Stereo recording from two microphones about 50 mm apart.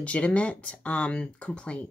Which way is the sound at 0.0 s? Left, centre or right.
Left.